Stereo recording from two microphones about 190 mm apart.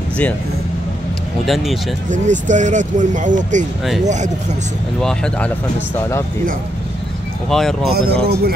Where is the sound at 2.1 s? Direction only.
40° right (ahead or behind).